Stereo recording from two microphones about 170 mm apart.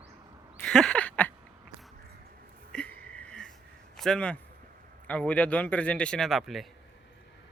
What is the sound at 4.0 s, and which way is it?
A man's voice, 5° left (ahead or behind).